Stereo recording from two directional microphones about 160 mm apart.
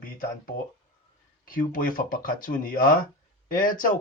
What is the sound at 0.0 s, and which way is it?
Speech, 60° left (ahead or behind).